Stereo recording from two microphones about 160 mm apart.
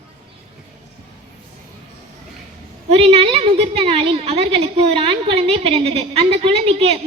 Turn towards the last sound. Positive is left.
turn(degrees=-40)  # may be behind; listen again after turning